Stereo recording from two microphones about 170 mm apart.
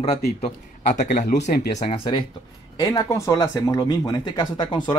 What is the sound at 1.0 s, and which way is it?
Speech, 50° left (ahead or behind).